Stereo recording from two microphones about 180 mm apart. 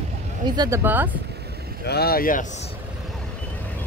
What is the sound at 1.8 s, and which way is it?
Speech, 60° left (ahead or behind).